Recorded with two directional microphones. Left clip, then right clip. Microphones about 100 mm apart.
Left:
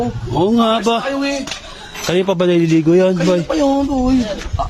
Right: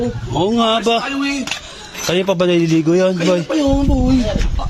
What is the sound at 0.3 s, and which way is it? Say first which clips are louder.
Speech: left 1 dB; 40° left (ahead or behind).